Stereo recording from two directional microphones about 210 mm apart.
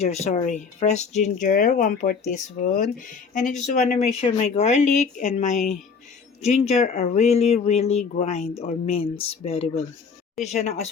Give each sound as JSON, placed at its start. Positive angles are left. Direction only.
{"t": 0.0, "sound": "speech", "side_deg": 30}
{"t": 3.3, "sound": "speech", "side_deg": 35}